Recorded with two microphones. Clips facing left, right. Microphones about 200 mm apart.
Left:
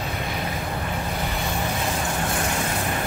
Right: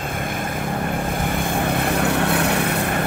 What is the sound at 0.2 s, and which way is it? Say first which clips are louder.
Vehicle: right 3 dB; 50° right (ahead or behind).